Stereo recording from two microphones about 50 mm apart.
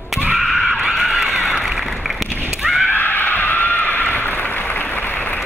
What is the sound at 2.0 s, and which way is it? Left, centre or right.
Run, centre.